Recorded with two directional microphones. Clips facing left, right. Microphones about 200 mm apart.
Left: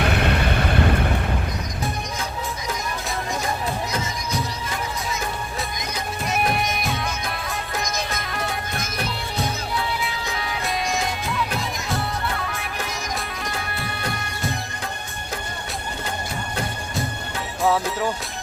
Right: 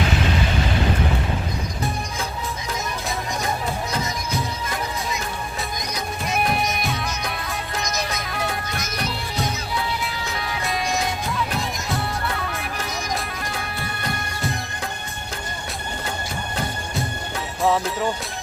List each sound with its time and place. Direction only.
0.0 s vehicle: 60° left (ahead or behind)
6.3 s music: centre (ahead or behind)
10.5 s music: centre (ahead or behind)
17.6 s music: centre (ahead or behind)